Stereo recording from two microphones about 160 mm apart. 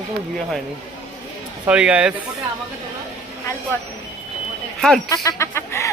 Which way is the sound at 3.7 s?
15° left (ahead or behind).